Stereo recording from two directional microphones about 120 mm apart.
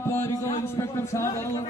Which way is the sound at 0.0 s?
20° left (ahead or behind).